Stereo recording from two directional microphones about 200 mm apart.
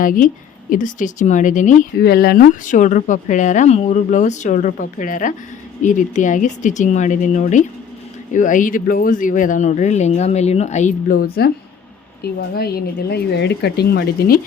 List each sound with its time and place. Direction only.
0.0 s speech: 40° left (ahead or behind)
2.0 s speech: 50° left (ahead or behind)